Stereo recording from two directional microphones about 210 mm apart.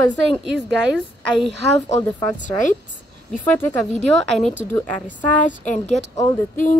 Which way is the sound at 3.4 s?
5° left (ahead or behind).